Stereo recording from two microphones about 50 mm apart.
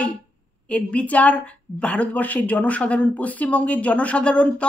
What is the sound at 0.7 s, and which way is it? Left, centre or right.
A woman's voice, left.